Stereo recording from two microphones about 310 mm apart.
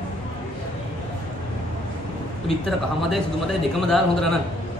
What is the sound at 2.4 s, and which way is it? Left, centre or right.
A man's voice, centre.